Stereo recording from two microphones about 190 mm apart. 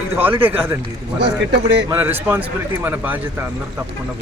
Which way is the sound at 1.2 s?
65° right (ahead or behind).